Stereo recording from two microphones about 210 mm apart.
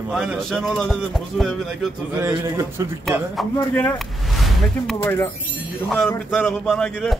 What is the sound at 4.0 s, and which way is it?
Speech, centre (ahead or behind).